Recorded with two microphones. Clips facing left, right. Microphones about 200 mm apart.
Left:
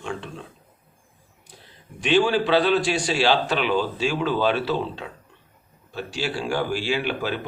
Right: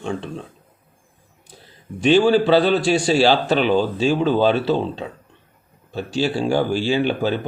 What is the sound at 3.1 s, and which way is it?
Speech, 40° right (ahead or behind).